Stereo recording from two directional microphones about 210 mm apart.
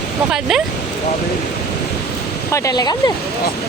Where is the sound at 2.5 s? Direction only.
15° left (ahead or behind).